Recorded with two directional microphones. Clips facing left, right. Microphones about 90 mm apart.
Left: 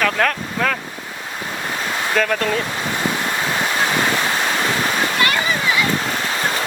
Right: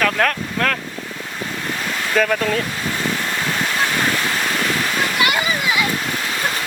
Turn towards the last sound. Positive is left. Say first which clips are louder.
# left 1 dB
turn(degrees=-15)  # may be behind; listen again after turning